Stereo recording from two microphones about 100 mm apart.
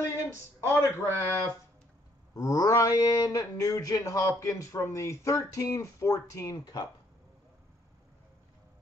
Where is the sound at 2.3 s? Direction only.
40° left (ahead or behind).